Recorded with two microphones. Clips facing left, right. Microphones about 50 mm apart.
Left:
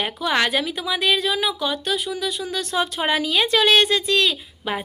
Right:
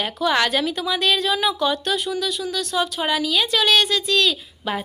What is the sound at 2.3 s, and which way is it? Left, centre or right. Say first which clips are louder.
Speech: right 1 dB; left.